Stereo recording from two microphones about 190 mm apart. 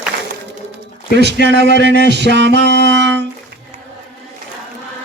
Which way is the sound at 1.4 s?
65° right (ahead or behind).